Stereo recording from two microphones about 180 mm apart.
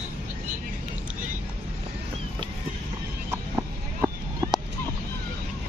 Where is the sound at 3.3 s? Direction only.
15° right (ahead or behind).